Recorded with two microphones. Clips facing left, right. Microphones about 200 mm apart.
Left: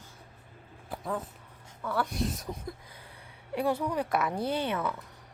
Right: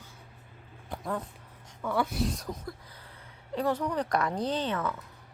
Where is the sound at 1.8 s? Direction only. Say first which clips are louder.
Right 2 dB; 10° right (ahead or behind).